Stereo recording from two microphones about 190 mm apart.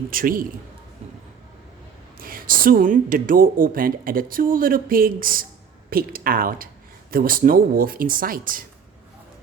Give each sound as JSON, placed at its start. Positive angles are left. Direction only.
{"t": 0.1, "sound": "speech", "side_deg": -50}
{"t": 2.1, "sound": "speech", "side_deg": -50}